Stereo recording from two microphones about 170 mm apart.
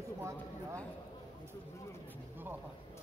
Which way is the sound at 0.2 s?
15° right (ahead or behind).